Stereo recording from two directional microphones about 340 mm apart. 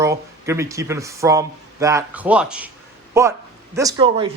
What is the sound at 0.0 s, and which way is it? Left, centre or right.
Speech, centre.